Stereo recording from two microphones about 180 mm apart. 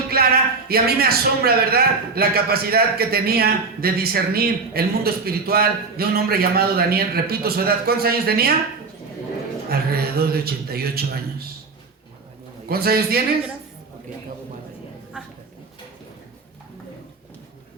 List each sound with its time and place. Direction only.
0.1 s a sound: 60° right (ahead or behind)
0.7 s a man's voice: 60° right (ahead or behind)
9.6 s a man's voice: 60° right (ahead or behind)
12.6 s a man's voice: 60° right (ahead or behind)